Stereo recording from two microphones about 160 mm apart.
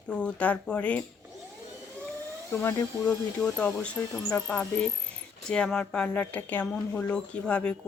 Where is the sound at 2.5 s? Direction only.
15° left (ahead or behind).